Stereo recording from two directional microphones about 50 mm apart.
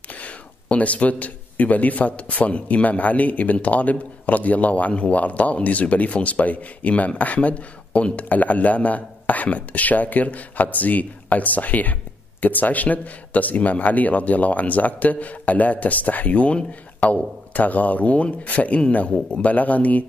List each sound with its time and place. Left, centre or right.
0.1 s a man's voice: left